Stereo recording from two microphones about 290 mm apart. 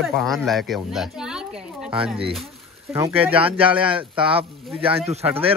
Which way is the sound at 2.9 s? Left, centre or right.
Centre.